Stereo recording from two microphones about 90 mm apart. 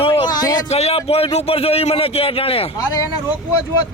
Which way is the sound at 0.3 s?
45° left (ahead or behind).